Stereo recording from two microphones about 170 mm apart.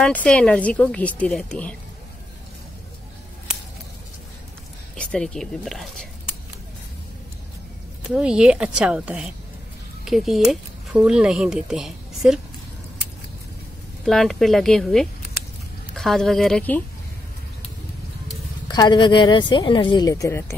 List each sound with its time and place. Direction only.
0.0 s a woman's voice: 5° left (ahead or behind)
4.9 s a woman's voice: 5° left (ahead or behind)
8.1 s a woman's voice: 5° right (ahead or behind)
14.0 s a woman's voice: centre (ahead or behind)
18.7 s speech: 25° left (ahead or behind)